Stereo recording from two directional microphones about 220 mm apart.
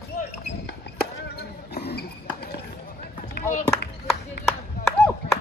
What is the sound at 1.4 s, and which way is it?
Basketball bounce, 45° left (ahead or behind).